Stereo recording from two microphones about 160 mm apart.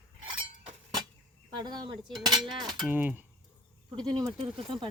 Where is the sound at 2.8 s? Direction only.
10° right (ahead or behind).